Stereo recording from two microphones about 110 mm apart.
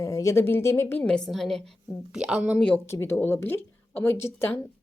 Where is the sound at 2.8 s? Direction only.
25° left (ahead or behind).